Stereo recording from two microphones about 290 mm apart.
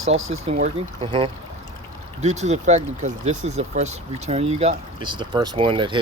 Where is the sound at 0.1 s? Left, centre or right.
Right.